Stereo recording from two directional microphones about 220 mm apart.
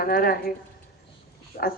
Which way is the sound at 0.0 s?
40° left (ahead or behind).